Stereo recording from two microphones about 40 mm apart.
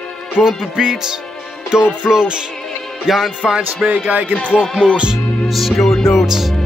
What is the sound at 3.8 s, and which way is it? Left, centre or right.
Speech, right.